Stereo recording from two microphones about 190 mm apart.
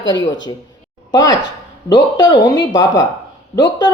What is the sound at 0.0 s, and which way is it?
Speech, 75° left (ahead or behind).